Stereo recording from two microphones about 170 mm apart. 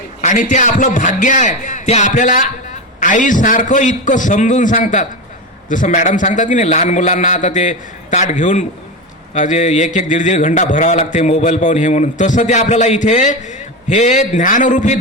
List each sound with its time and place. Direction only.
0.2 s a man's voice: 45° left (ahead or behind)